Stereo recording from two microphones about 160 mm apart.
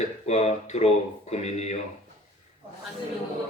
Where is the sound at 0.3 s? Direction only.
40° left (ahead or behind).